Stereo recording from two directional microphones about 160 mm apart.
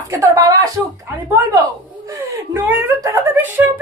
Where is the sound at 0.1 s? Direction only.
20° right (ahead or behind).